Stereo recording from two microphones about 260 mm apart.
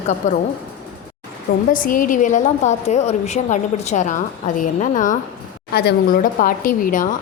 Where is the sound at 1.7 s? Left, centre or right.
Left.